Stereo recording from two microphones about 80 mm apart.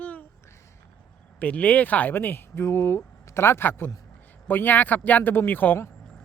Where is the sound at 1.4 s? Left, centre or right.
Centre.